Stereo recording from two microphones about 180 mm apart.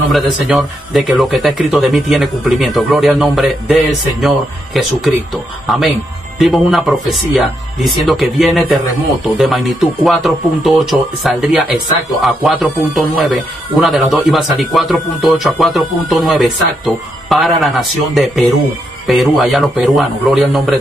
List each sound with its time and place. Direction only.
0.1 s speech: centre (ahead or behind)